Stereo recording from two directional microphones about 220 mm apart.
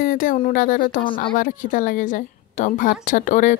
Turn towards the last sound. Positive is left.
turn(degrees=35)  # may be behind; listen again after turning